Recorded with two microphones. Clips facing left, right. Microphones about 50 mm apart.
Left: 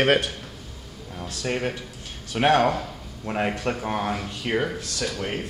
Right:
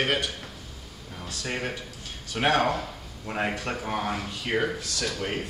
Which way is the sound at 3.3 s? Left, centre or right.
Left.